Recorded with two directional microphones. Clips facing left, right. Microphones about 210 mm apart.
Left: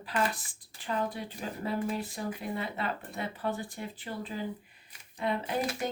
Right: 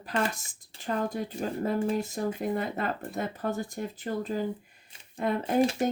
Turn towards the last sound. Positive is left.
turn(degrees=-45)  # may be behind; listen again after turning